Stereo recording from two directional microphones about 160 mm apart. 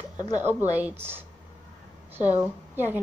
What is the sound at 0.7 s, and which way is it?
Speech, 15° right (ahead or behind).